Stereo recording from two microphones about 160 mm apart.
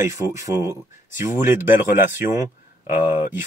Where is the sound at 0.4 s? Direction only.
20° right (ahead or behind).